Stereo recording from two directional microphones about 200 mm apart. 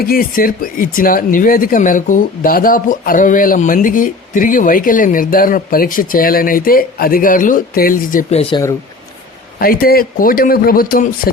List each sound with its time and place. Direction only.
0.0 s speech: 45° left (ahead or behind)
8.3 s speech: 30° left (ahead or behind)
9.6 s speech: 45° left (ahead or behind)